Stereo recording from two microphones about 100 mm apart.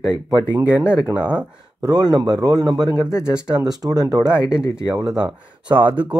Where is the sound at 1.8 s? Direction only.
45° right (ahead or behind).